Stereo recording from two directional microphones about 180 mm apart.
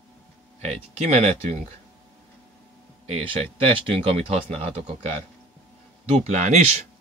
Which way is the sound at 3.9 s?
35° right (ahead or behind).